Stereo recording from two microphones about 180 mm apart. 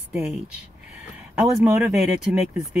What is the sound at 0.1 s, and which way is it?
Speech, 5° right (ahead or behind).